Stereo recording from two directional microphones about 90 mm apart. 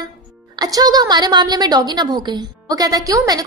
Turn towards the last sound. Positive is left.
turn(degrees=-40)  # may be behind; listen again after turning